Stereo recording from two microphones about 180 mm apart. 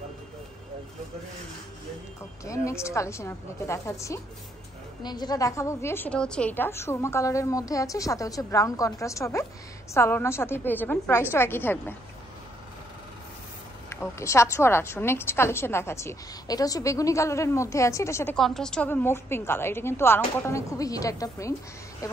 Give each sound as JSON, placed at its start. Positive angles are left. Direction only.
{"t": 2.4, "sound": "a woman's voice", "side_deg": 15}
{"t": 13.8, "sound": "a woman's voice", "side_deg": 15}
{"t": 18.3, "sound": "a woman's voice", "side_deg": 5}